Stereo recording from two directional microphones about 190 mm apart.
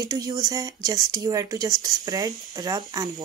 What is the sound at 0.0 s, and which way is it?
Speech, 20° right (ahead or behind).